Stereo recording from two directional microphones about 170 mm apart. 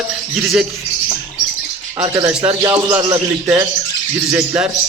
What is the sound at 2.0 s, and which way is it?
Speech, 20° right (ahead or behind).